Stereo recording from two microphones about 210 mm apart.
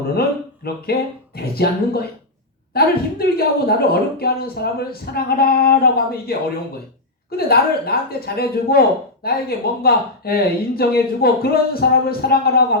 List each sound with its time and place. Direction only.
0.2 s a woman's voice: 45° left (ahead or behind)